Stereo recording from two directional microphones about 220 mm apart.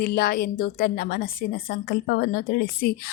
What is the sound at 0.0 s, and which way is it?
A woman's voice, 45° left (ahead or behind).